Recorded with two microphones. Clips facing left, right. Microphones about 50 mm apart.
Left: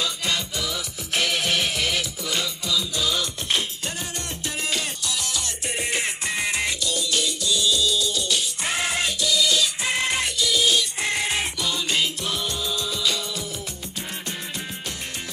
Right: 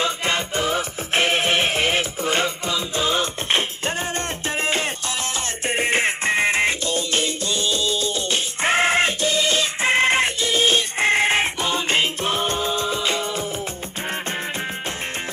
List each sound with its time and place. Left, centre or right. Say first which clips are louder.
0.0 s music: right 4 dB; right